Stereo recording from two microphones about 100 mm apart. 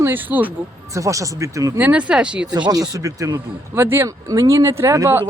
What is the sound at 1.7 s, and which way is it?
Speech, 15° right (ahead or behind).